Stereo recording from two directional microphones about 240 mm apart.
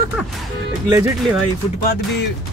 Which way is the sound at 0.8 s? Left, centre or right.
Centre.